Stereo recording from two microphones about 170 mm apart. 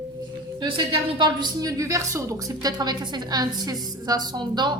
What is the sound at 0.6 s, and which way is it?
A woman's voice, 25° right (ahead or behind).